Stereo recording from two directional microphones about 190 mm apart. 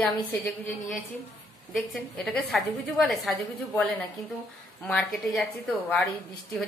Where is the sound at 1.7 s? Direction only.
Centre (ahead or behind).